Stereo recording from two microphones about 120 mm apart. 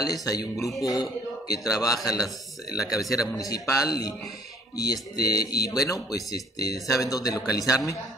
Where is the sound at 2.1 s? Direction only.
5° right (ahead or behind).